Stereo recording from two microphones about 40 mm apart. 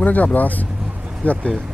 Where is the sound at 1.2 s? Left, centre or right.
Left.